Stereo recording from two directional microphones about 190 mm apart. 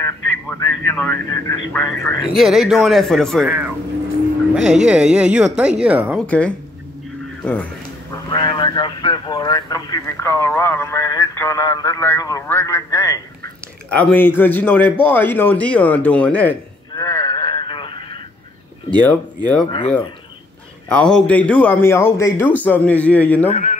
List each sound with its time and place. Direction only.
0.0 s speech: 10° left (ahead or behind)
2.3 s speech: centre (ahead or behind)
6.2 s speech: 5° left (ahead or behind)
8.3 s speech: 25° left (ahead or behind); by 16.5 s 10° left (ahead or behind)
16.9 s a sound: 15° left (ahead or behind)
18.9 s speech: 10° left (ahead or behind)
20.9 s speech: 5° left (ahead or behind)
23.5 s speech: 40° left (ahead or behind)